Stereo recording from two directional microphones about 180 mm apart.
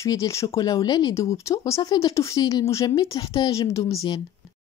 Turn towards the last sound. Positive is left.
turn(degrees=15)  # may be behind; listen again after turning